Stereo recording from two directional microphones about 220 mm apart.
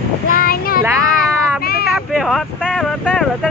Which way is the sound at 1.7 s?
45° left (ahead or behind).